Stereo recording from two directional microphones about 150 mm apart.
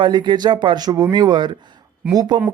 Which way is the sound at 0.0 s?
30° right (ahead or behind).